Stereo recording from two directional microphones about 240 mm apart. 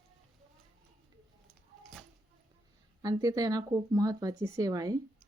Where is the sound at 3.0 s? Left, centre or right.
Centre.